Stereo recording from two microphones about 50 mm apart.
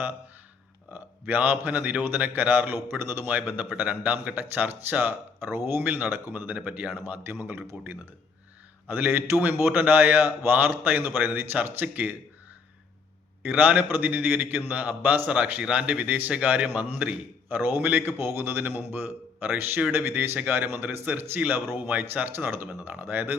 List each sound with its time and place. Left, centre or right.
0.9 s a man's voice: right
2.7 s speech: right
3.2 s a man's voice: right
6.1 s a man's voice: right
7.3 s a man's voice: right
13.4 s a man's voice: right
17.6 s a man's voice: right
18.2 s a man's voice: right